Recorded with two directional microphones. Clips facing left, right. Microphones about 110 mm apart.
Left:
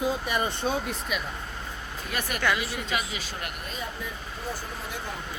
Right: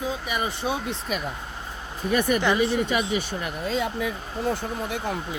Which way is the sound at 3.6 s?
90° right.